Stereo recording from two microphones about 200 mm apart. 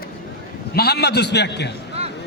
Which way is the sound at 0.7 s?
50° left (ahead or behind).